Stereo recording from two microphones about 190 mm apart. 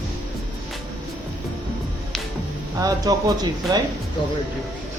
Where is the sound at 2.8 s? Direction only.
20° right (ahead or behind).